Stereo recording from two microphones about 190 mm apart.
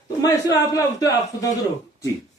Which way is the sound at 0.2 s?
20° left (ahead or behind).